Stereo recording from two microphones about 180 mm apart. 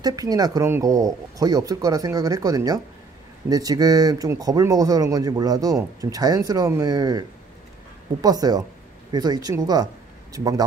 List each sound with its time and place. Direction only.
0.0 s speech: 20° right (ahead or behind)